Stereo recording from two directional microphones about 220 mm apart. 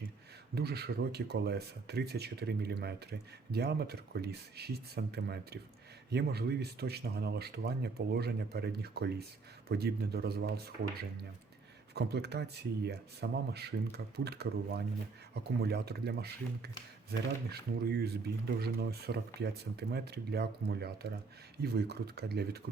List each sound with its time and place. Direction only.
0.5 s speech: 45° right (ahead or behind)
11.9 s speech: 50° right (ahead or behind)